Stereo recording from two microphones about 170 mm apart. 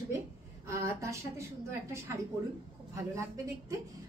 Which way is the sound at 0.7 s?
15° right (ahead or behind).